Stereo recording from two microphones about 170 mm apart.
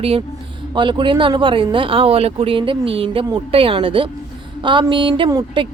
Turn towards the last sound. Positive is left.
turn(degrees=-25)  # may be behind; listen again after turning